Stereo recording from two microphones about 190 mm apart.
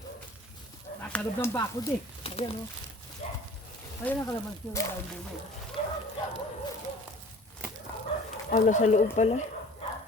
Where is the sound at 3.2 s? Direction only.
35° left (ahead or behind).